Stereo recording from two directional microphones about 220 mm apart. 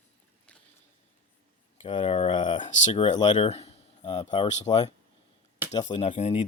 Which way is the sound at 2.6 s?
35° left (ahead or behind).